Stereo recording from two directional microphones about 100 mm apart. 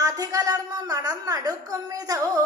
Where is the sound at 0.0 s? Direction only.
35° right (ahead or behind).